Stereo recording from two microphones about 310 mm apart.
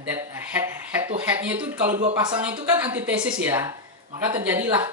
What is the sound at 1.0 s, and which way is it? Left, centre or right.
Speech, centre.